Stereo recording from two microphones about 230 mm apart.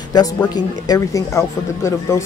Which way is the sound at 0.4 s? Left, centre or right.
Centre.